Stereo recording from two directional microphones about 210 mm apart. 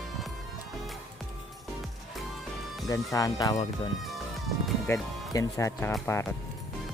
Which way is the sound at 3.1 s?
15° left (ahead or behind).